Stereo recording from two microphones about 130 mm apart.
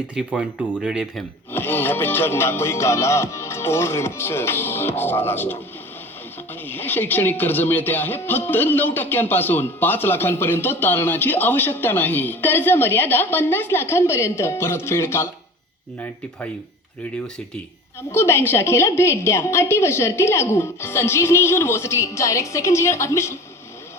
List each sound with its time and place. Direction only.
0.1 s speech: 10° right (ahead or behind)
1.5 s a woman's voice: 15° left (ahead or behind)
6.7 s speech: 15° left (ahead or behind)
18.1 s a woman's voice: 20° left (ahead or behind)